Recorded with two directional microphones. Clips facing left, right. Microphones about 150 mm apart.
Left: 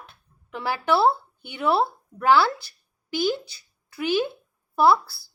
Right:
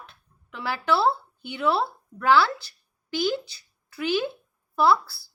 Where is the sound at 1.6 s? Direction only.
35° left (ahead or behind).